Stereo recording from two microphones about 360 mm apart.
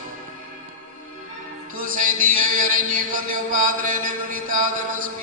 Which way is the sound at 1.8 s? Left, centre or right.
Right.